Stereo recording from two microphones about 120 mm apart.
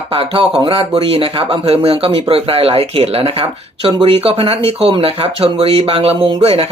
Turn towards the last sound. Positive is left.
turn(degrees=-50)  # may be behind; listen again after turning